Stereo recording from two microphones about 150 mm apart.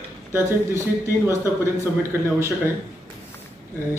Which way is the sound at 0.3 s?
20° right (ahead or behind).